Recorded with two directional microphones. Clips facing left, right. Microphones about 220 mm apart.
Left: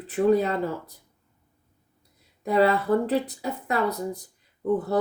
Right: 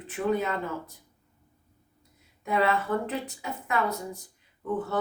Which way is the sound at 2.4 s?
35° left (ahead or behind).